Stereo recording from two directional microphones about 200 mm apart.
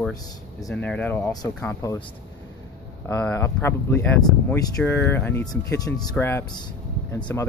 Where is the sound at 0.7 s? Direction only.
5° left (ahead or behind).